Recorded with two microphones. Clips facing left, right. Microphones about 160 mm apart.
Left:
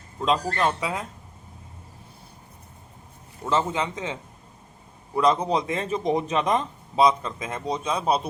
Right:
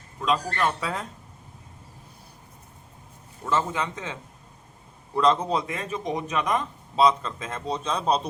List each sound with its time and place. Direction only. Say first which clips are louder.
0.2 s speech: left 2 dB; 25° left (ahead or behind)
3.4 s a man's voice: left 2 dB; 20° left (ahead or behind)